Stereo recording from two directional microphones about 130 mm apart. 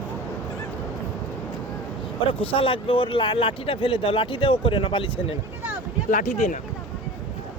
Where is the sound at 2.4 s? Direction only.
45° left (ahead or behind).